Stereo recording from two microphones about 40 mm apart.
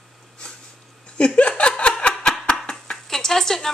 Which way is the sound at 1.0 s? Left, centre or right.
Left.